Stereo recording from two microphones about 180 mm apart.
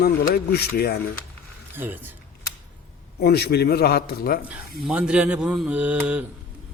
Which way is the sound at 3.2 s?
60° left (ahead or behind).